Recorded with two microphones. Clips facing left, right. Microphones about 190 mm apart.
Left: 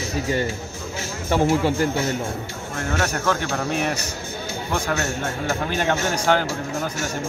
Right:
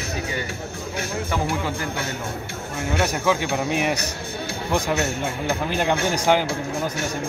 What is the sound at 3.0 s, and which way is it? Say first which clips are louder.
Speech: right 2 dB; 10° right (ahead or behind).